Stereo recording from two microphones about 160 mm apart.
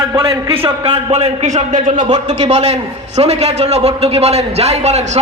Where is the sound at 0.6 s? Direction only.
35° right (ahead or behind).